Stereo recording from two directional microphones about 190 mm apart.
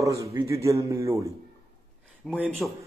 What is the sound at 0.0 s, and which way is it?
Speech, 15° right (ahead or behind).